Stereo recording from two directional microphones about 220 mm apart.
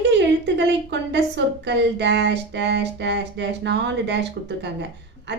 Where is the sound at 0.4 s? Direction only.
50° right (ahead or behind).